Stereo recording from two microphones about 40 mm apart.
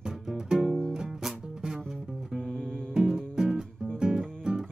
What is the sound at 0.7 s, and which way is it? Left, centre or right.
Music, centre.